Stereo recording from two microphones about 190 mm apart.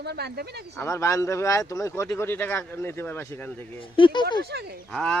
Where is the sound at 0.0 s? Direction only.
60° right (ahead or behind).